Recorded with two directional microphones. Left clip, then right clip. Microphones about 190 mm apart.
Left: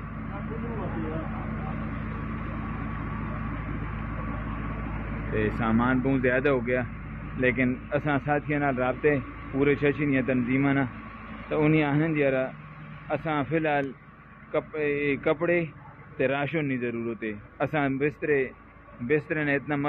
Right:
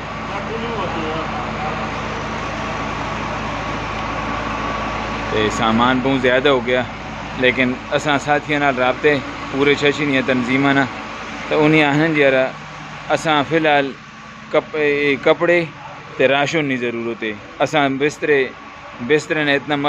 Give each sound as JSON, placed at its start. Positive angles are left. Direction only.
{"t": 5.3, "sound": "a man's voice", "side_deg": -25}